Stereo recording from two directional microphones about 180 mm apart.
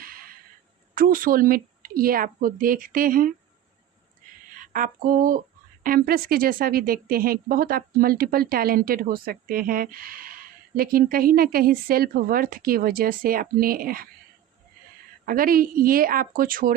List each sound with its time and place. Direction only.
0.0 s a sound: 55° right (ahead or behind)
0.9 s speech: 50° right (ahead or behind)
4.6 s speech: 50° right (ahead or behind)
15.3 s speech: 50° right (ahead or behind)